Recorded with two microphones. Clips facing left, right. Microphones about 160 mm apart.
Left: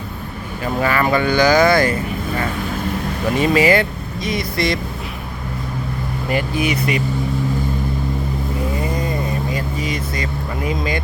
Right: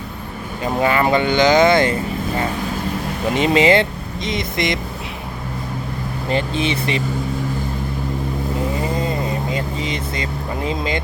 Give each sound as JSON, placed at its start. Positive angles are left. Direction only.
{"t": 0.6, "sound": "speech", "side_deg": -20}
{"t": 6.2, "sound": "speech", "side_deg": -25}
{"t": 9.0, "sound": "vehicle", "side_deg": -25}